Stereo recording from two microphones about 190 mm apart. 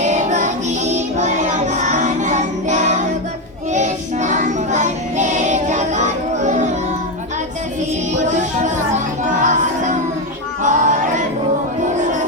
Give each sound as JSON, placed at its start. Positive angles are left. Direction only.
{"t": 0.0, "sound": "music", "side_deg": -40}
{"t": 3.7, "sound": "child singing", "side_deg": -40}
{"t": 8.1, "sound": "music", "side_deg": -40}
{"t": 10.6, "sound": "singing", "side_deg": -40}